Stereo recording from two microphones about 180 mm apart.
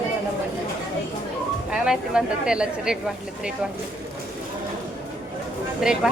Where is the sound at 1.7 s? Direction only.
5° right (ahead or behind).